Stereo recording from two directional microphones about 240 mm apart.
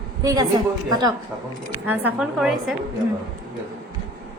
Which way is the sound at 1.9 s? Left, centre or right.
Centre.